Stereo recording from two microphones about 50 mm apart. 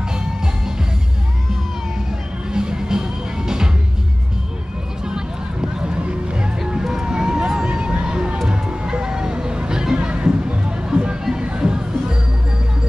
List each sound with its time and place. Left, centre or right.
2.5 s music: centre
5.0 s music: centre
6.6 s vehicle: centre
8.5 s music: centre